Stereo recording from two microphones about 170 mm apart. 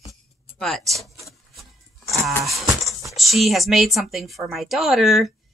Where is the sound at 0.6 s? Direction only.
Centre (ahead or behind).